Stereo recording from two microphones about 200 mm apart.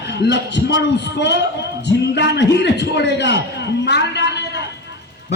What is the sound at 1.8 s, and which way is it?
A man's voice, 60° left (ahead or behind).